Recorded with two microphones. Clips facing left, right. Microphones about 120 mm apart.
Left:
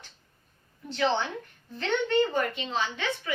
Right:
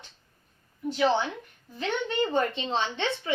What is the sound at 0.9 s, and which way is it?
A child's voice, 10° right (ahead or behind).